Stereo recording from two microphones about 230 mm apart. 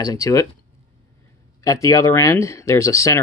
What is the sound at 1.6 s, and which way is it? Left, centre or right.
Speech, centre.